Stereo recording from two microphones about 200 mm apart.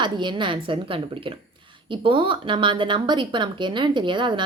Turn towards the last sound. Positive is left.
turn(degrees=-25)  # may be behind; listen again after turning